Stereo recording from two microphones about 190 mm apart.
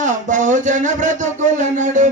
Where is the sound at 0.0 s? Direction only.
40° right (ahead or behind).